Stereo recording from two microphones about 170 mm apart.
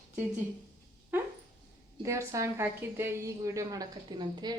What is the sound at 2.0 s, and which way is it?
A woman's voice, 15° right (ahead or behind).